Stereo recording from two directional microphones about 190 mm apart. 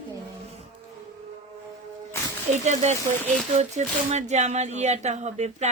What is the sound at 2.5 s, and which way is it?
Speech, 40° right (ahead or behind).